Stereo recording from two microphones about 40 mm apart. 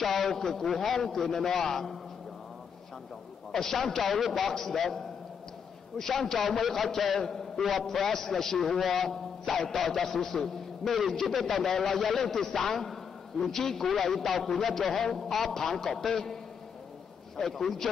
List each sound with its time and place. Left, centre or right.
0.0 s a man's voice: centre
3.5 s a man's voice: centre
17.4 s a man's voice: centre